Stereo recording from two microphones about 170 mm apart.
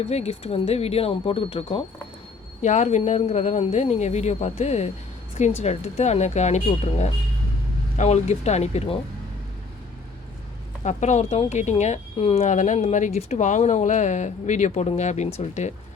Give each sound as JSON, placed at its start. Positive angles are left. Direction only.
{"t": 0.1, "sound": "speech", "side_deg": 40}
{"t": 10.8, "sound": "speech", "side_deg": 45}